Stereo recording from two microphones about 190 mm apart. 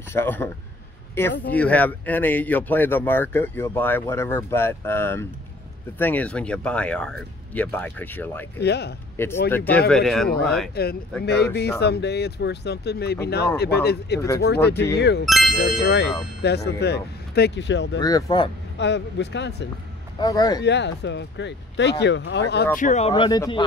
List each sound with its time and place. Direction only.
0.1 s speech: 10° left (ahead or behind)
8.5 s speech: 60° left (ahead or behind)
9.1 s speech: 10° left (ahead or behind)
10.7 s speech: 55° left (ahead or behind)
15.2 s speech: centre (ahead or behind)
15.8 s speech: 65° left (ahead or behind)
17.9 s speech: 20° left (ahead or behind)
18.8 s speech: 70° left (ahead or behind)
20.2 s speech: 20° left (ahead or behind)
20.6 s speech: 65° left (ahead or behind)
22.8 s speech: 40° left (ahead or behind); by 23.6 s 20° left (ahead or behind)